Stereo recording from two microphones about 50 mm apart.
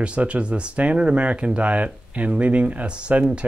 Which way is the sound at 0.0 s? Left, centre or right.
Right.